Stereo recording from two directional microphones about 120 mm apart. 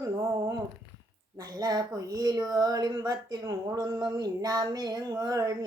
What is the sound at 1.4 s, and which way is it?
Speech, 30° right (ahead or behind).